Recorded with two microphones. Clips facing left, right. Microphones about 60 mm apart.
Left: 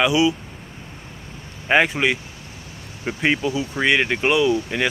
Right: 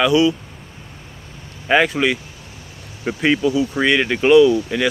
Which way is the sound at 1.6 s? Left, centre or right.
Centre.